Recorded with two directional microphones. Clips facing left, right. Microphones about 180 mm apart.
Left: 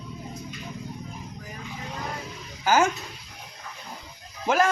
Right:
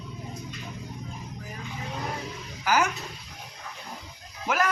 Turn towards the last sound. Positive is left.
turn(degrees=25)  # may be behind; listen again after turning